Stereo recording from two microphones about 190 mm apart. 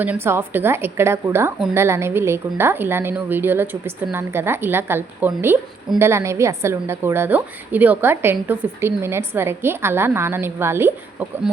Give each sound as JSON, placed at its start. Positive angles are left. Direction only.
{"t": 0.0, "sound": "a woman's voice", "side_deg": -10}